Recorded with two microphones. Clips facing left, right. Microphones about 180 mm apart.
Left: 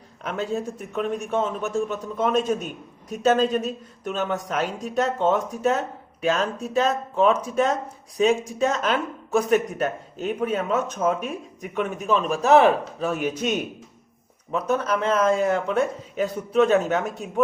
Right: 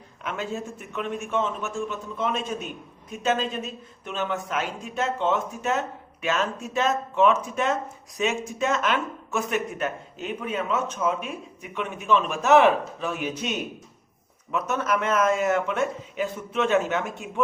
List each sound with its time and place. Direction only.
0.2 s speech: 35° left (ahead or behind)
14.5 s speech: 35° left (ahead or behind)